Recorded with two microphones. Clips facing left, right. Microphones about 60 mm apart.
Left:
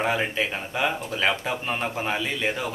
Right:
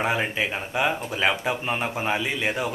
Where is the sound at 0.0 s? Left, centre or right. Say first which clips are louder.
Even; centre.